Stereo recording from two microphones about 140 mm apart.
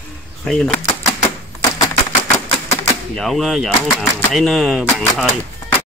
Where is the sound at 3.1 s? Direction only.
Centre (ahead or behind).